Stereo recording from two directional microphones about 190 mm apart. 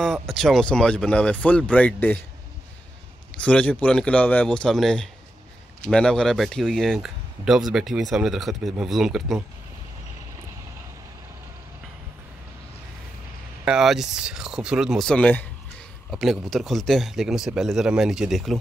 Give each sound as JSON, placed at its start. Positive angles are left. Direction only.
{"t": 0.0, "sound": "speech", "side_deg": 0}
{"t": 3.3, "sound": "speech", "side_deg": 5}
{"t": 13.7, "sound": "speech", "side_deg": 0}